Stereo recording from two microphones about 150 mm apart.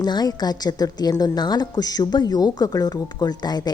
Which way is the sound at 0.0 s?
25° left (ahead or behind).